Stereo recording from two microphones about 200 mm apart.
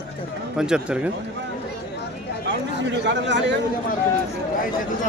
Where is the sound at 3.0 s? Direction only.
60° right (ahead or behind).